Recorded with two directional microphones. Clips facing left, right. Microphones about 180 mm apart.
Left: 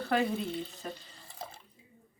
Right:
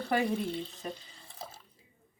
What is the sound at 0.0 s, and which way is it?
Speech, centre (ahead or behind).